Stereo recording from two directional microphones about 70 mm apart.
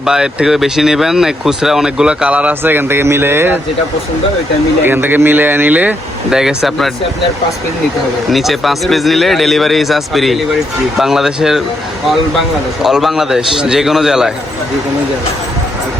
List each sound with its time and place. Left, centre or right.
0.0 s speech: centre; by 3.6 s right
4.8 s speech: right
6.3 s speech: centre
8.3 s speech: centre
12.8 s speech: centre